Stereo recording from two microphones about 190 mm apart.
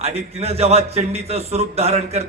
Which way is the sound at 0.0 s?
35° right (ahead or behind).